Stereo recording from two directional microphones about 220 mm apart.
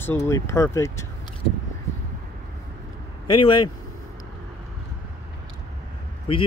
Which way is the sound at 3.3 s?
20° left (ahead or behind).